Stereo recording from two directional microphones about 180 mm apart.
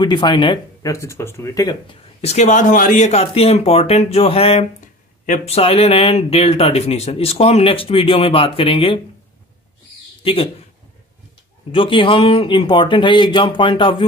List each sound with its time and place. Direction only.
0.0 s speech: 25° left (ahead or behind)
2.2 s speech: 40° left (ahead or behind)
10.2 s speech: 30° left (ahead or behind)
11.7 s speech: 30° left (ahead or behind)